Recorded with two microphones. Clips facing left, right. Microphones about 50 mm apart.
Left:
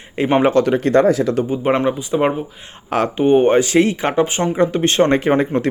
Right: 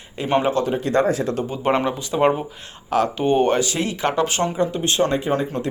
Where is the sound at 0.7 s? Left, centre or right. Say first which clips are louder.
Left 6 dB; left.